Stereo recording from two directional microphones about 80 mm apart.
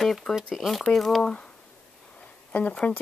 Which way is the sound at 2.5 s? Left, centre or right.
Centre.